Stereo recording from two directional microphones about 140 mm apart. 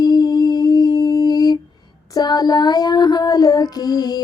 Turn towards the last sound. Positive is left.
turn(degrees=30)  # may be behind; listen again after turning